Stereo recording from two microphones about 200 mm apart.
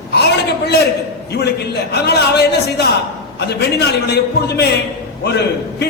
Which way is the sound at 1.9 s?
55° left (ahead or behind).